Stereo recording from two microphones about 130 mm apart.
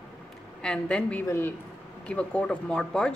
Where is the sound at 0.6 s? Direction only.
5° left (ahead or behind).